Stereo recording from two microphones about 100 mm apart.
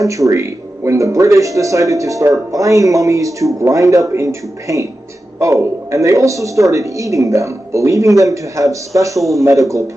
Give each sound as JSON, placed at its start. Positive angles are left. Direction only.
{"t": 0.0, "sound": "speech", "side_deg": -30}